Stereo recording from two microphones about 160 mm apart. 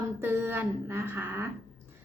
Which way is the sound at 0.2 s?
15° right (ahead or behind).